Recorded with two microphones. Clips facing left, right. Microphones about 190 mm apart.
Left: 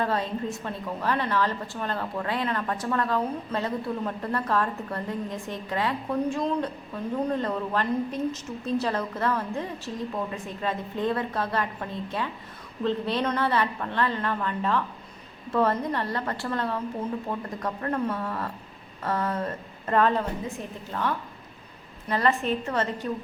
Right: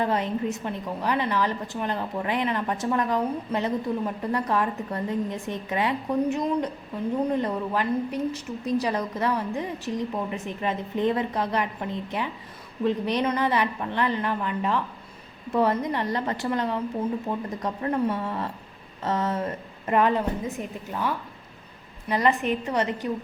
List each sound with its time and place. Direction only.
0.0 s a woman's voice: 20° right (ahead or behind)
22.1 s a woman's voice: 15° right (ahead or behind)